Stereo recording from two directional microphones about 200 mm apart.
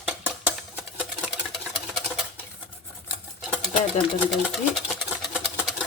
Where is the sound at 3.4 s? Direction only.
Centre (ahead or behind).